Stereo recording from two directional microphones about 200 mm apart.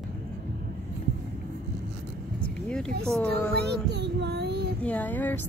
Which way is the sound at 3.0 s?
5° left (ahead or behind).